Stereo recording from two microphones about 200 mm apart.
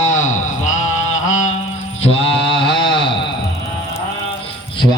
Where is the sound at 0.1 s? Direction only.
40° left (ahead or behind).